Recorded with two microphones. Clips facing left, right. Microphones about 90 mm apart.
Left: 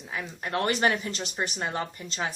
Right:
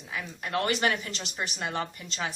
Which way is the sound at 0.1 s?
35° left (ahead or behind).